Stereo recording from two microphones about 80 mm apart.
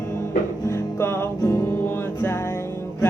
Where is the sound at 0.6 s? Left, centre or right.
Left.